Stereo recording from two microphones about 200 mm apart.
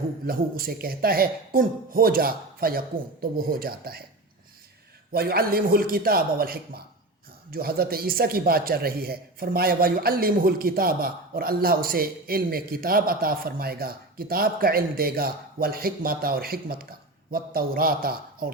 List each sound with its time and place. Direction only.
0.3 s speech: 45° right (ahead or behind)
5.1 s speech: 50° right (ahead or behind)